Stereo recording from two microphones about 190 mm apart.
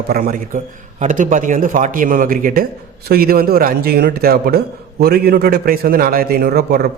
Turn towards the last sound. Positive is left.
turn(degrees=-55)  # may be behind; listen again after turning